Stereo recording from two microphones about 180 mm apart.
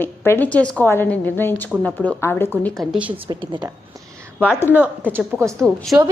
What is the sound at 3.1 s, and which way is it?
Speech, 25° right (ahead or behind).